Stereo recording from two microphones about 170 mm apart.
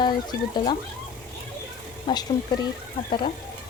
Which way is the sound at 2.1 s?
25° left (ahead or behind).